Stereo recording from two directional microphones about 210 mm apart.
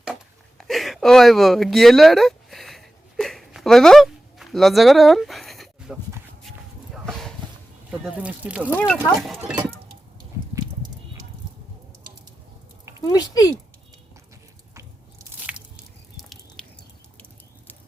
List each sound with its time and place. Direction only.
0.6 s a sound: centre (ahead or behind)
7.9 s speech: 5° right (ahead or behind)
13.1 s speech: 15° left (ahead or behind)
15.5 s squish: 5° right (ahead or behind)
16.6 s drip: 5° left (ahead or behind)